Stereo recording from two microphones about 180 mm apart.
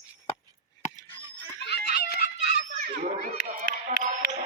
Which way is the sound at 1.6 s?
70° left (ahead or behind).